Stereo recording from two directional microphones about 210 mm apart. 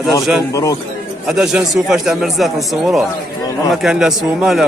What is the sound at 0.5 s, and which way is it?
Speech, 15° left (ahead or behind).